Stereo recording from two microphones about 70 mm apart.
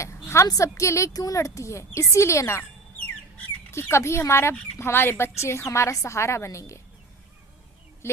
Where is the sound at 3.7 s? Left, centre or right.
Left.